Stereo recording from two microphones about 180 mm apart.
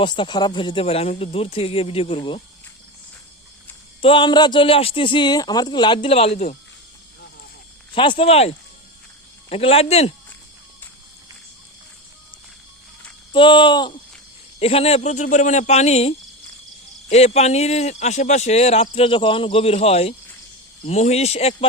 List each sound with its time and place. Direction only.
0.0 s a man's voice: 25° left (ahead or behind)
4.0 s speech: 30° left (ahead or behind)
7.9 s a man's voice: 30° left (ahead or behind)
13.3 s a man's voice: 30° left (ahead or behind)